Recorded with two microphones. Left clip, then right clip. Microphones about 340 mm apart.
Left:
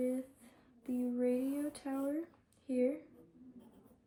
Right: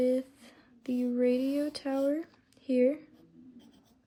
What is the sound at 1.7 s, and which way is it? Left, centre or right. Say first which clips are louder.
Speech: right 9 dB; centre.